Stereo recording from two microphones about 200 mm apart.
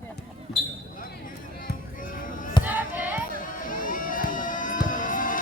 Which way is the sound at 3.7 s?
45° left (ahead or behind).